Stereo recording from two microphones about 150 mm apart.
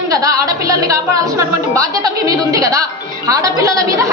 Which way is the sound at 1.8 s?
20° right (ahead or behind).